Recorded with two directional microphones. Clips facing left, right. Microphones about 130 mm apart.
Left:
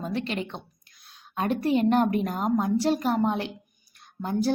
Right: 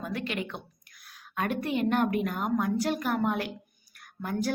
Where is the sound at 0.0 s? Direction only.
30° left (ahead or behind).